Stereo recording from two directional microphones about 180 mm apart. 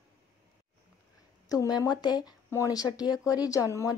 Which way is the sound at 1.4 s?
20° left (ahead or behind).